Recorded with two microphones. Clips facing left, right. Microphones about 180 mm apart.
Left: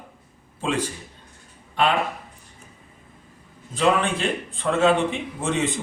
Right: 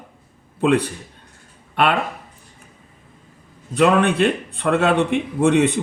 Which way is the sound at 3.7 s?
65° right (ahead or behind).